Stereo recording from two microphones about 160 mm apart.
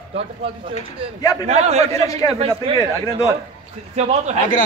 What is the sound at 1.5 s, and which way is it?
Speech, 40° right (ahead or behind).